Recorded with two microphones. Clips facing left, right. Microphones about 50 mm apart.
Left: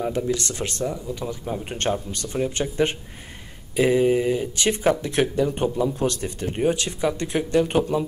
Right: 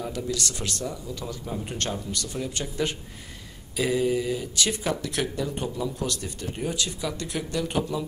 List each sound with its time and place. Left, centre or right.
0.0 s speech: left